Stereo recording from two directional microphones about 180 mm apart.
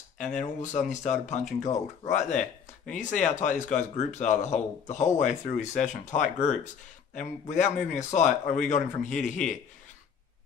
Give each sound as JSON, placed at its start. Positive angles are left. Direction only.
{"t": 0.2, "sound": "a man's voice", "side_deg": 40}